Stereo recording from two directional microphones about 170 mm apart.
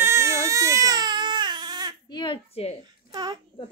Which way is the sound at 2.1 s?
25° left (ahead or behind).